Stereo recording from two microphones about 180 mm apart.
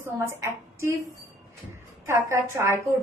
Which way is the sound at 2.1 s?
15° right (ahead or behind).